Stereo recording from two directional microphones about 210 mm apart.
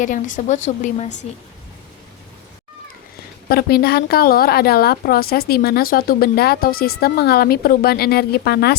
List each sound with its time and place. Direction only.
0.0 s a woman's voice: 35° left (ahead or behind)
3.5 s a woman's voice: 45° left (ahead or behind)